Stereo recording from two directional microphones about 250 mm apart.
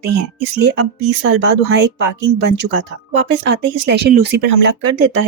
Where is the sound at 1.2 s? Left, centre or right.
Right.